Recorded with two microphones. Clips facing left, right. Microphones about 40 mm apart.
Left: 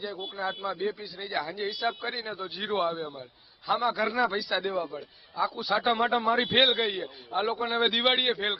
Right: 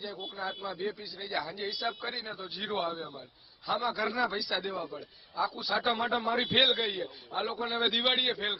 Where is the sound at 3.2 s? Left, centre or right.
Centre.